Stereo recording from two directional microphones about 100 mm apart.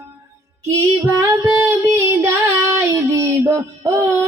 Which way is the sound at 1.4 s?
20° right (ahead or behind).